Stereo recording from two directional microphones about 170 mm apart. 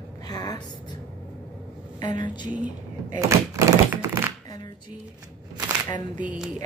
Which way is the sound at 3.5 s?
15° right (ahead or behind).